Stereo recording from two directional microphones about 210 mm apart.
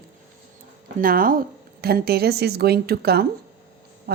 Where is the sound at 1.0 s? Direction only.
40° right (ahead or behind).